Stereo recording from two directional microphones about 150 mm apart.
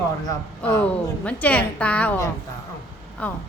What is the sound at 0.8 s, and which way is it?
A woman's voice, 10° left (ahead or behind).